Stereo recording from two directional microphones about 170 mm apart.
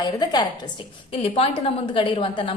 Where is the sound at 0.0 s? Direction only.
25° left (ahead or behind).